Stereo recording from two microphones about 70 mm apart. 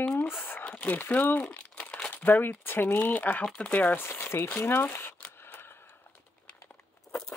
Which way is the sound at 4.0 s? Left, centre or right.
Left.